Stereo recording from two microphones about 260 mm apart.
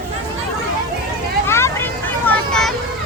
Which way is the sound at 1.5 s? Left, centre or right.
Centre.